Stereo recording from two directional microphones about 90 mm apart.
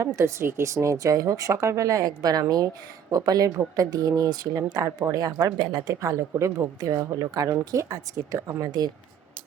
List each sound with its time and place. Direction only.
0.2 s speech: 30° right (ahead or behind)